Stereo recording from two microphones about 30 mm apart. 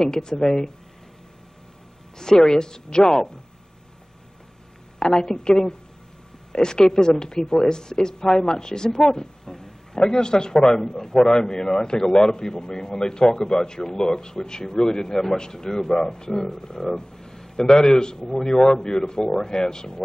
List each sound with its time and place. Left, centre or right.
0.0 s a man's voice: left
2.1 s a man's voice: centre
4.9 s a man's voice: left